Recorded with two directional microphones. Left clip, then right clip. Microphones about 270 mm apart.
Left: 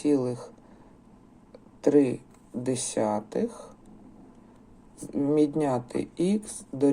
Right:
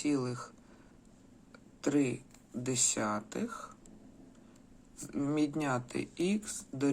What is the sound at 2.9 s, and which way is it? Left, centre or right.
Speech, right.